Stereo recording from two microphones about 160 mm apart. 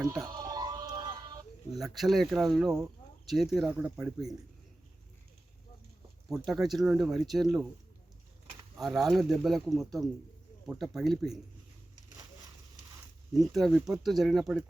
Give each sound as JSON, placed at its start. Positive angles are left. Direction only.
{"t": 0.3, "sound": "music", "side_deg": -25}
{"t": 1.7, "sound": "speech", "side_deg": 0}
{"t": 3.7, "sound": "speech", "side_deg": -10}
{"t": 6.2, "sound": "speech", "side_deg": 0}
{"t": 8.8, "sound": "speech", "side_deg": 0}
{"t": 13.5, "sound": "speech", "side_deg": 0}